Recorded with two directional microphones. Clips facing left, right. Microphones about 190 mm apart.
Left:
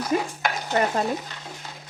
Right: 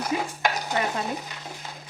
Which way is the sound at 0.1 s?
50° left (ahead or behind).